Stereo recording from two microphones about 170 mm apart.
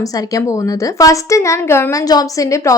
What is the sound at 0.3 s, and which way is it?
A woman's voice, 20° left (ahead or behind).